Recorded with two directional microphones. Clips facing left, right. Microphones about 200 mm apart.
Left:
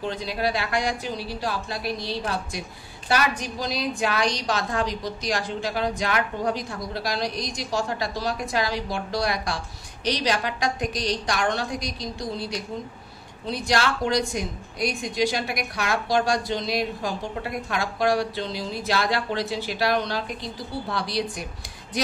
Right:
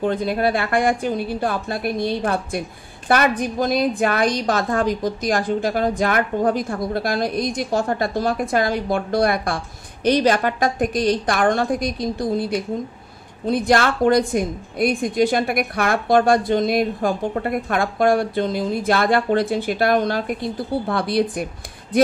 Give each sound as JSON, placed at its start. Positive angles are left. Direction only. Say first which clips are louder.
{"t": 0.0, "sound": "a woman's voice", "louder": "right 7 dB", "side_deg": -50}